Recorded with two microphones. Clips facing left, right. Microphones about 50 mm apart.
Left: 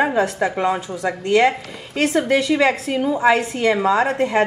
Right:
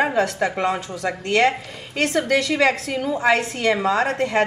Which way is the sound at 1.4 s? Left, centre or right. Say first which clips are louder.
Left 1 dB; left.